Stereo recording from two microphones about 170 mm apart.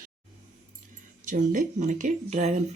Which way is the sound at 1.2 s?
50° right (ahead or behind).